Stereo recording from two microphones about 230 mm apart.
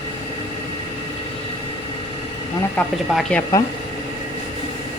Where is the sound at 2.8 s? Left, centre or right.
Centre.